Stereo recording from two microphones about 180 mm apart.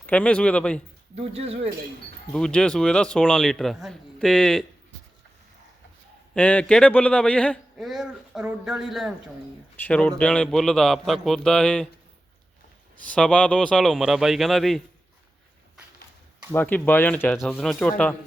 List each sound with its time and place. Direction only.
0.0 s speech: 5° left (ahead or behind)
1.1 s speech: 35° right (ahead or behind)
2.3 s a man's voice: 5° left (ahead or behind)
6.3 s a man's voice: 5° left (ahead or behind)
9.7 s a man's voice: 10° left (ahead or behind)
13.1 s a man's voice: 5° left (ahead or behind)
16.5 s speech: 10° left (ahead or behind)
17.3 s a man's voice: centre (ahead or behind)